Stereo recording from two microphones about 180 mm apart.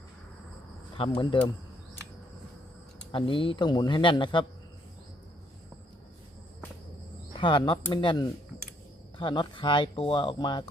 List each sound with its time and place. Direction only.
0.9 s speech: 30° left (ahead or behind)
3.1 s speech: 30° left (ahead or behind)
7.3 s speech: 25° left (ahead or behind)